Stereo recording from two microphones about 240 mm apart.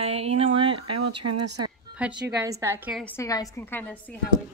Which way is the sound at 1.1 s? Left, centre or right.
Right.